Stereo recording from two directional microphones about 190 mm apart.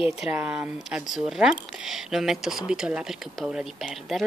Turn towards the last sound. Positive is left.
turn(degrees=0)  # may be behind; listen again after turning